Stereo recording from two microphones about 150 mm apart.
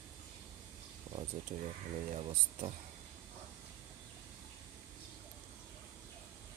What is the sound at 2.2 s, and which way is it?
Speech, 40° right (ahead or behind).